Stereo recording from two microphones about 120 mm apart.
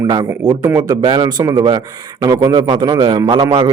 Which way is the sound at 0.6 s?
30° right (ahead or behind).